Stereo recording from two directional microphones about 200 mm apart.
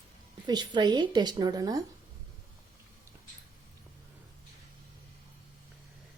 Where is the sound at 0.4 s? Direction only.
20° right (ahead or behind).